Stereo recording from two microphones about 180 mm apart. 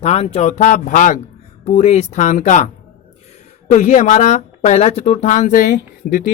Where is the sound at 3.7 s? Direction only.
45° left (ahead or behind).